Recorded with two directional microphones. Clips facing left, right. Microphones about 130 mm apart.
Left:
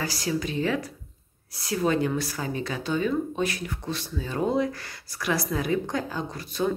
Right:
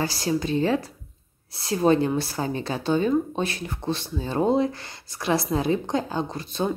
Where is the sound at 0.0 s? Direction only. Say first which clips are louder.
Right 3 dB; 30° right (ahead or behind).